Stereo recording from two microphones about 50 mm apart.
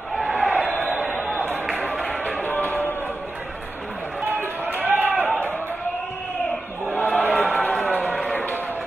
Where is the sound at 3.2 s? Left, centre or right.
Right.